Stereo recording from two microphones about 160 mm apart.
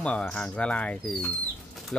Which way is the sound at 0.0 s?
5° left (ahead or behind).